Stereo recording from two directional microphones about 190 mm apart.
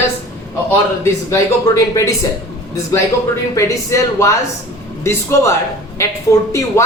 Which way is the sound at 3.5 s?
15° left (ahead or behind).